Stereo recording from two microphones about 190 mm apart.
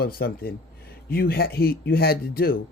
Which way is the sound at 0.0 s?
50° left (ahead or behind).